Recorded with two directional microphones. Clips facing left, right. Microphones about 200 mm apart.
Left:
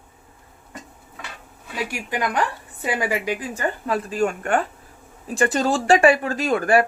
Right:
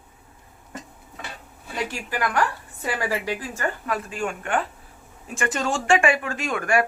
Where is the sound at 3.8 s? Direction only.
35° left (ahead or behind).